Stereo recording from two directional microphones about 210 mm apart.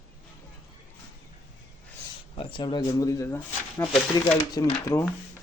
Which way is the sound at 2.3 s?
25° left (ahead or behind).